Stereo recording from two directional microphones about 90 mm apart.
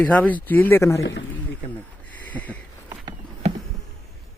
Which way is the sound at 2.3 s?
15° left (ahead or behind).